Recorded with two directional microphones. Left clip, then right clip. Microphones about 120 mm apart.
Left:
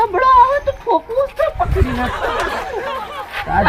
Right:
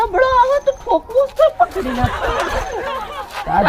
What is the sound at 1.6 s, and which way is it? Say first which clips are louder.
Speech: right 2 dB; centre (ahead or behind).